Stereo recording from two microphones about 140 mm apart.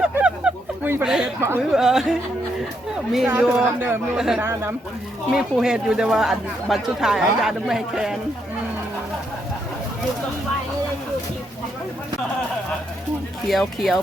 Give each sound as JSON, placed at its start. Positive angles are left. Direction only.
{"t": 0.0, "sound": "a sound", "side_deg": -5}
{"t": 1.0, "sound": "speech", "side_deg": -5}
{"t": 1.4, "sound": "speech", "side_deg": -15}
{"t": 1.7, "sound": "speech", "side_deg": -5}
{"t": 3.2, "sound": "speech", "side_deg": -10}
{"t": 5.3, "sound": "speech", "side_deg": -5}
{"t": 13.5, "sound": "speech", "side_deg": 0}